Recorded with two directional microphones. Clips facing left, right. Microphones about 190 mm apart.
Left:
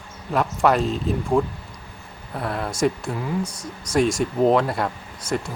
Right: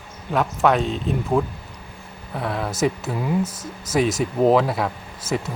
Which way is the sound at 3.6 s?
25° right (ahead or behind).